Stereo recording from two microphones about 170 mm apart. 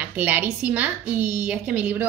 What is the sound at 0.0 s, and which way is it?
A woman's voice, 10° right (ahead or behind).